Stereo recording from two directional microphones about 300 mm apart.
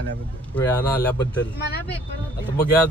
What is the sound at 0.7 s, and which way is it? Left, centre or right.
Speech, centre.